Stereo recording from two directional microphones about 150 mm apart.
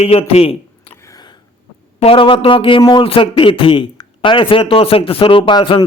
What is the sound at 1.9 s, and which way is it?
Speech, 40° left (ahead or behind).